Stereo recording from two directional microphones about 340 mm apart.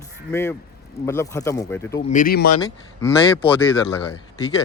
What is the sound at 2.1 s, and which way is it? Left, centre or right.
Speech, left.